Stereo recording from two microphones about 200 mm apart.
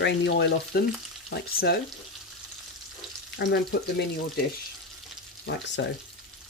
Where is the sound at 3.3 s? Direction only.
60° left (ahead or behind).